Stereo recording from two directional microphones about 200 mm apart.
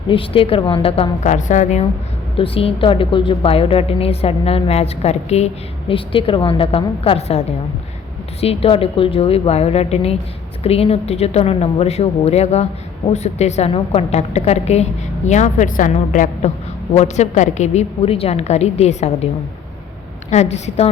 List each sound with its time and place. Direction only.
0.1 s a woman's voice: 25° left (ahead or behind)
20.3 s a woman's voice: 35° left (ahead or behind)